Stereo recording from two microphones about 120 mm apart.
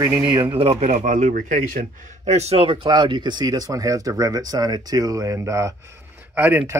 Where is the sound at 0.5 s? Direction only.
55° right (ahead or behind); by 1.6 s 90° right.